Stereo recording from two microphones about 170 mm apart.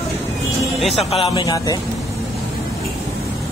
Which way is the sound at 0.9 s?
35° left (ahead or behind).